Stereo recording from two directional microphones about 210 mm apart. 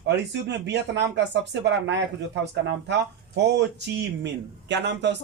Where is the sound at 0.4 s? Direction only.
55° right (ahead or behind).